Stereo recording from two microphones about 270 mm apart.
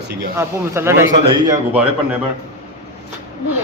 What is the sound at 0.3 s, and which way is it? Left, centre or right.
A man's voice, centre.